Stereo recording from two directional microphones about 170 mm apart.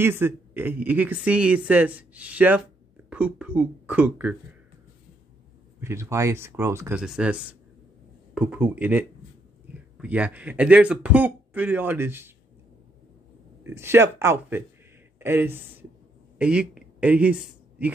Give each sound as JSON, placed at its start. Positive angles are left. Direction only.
{"t": 0.0, "sound": "speech", "side_deg": -15}
{"t": 5.8, "sound": "speech", "side_deg": -15}
{"t": 7.0, "sound": "speech", "side_deg": -5}
{"t": 13.7, "sound": "a man's voice", "side_deg": -15}